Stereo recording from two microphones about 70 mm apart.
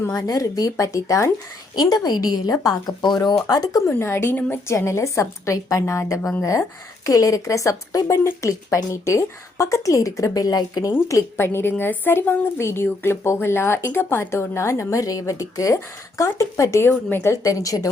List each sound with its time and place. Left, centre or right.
0.1 s speech: left
1.7 s speech: left
3.5 s speech: left
3.8 s a woman's voice: left
11.3 s speech: left
17.3 s speech: left